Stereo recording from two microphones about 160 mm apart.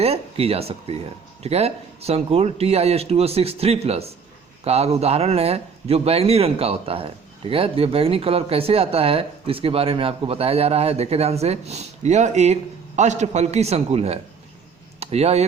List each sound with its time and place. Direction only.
0.0 s a man's voice: 40° right (ahead or behind)